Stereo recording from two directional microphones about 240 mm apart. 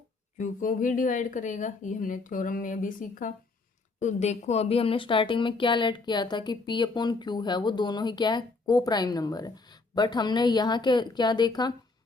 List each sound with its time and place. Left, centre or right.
0.3 s a woman's voice: left; by 11.7 s centre